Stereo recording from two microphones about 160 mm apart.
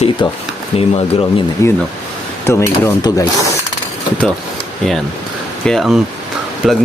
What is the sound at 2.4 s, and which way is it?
Rub, 20° left (ahead or behind).